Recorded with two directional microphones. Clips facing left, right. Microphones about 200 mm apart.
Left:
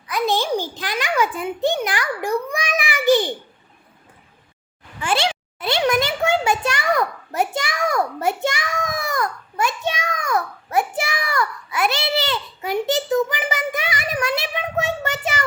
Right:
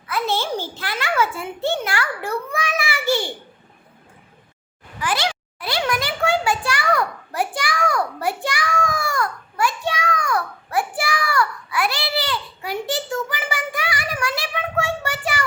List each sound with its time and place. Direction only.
0.1 s a child's voice: 15° left (ahead or behind)
4.9 s a child's voice: 25° left (ahead or behind)